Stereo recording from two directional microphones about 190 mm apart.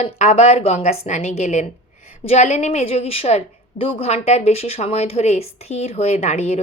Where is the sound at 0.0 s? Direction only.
35° left (ahead or behind).